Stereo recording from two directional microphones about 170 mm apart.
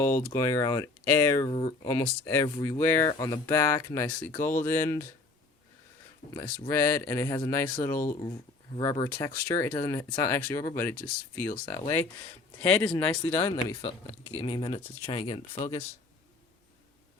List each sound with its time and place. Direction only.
0.0 s speech: 15° left (ahead or behind)
1.5 s speech: 30° left (ahead or behind)
6.7 s speech: 15° left (ahead or behind)
10.9 s speech: 60° left (ahead or behind)
12.9 s speech: 30° left (ahead or behind)